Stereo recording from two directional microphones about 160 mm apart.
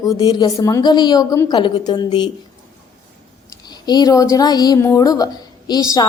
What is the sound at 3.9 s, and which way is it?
A woman's voice, 25° left (ahead or behind).